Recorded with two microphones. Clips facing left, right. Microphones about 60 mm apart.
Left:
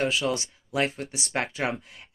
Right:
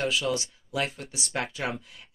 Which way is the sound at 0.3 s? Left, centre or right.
Left.